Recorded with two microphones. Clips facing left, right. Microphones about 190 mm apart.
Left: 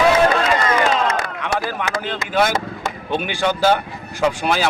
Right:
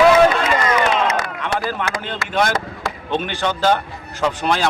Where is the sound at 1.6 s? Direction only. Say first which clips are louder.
Even; 5° left (ahead or behind).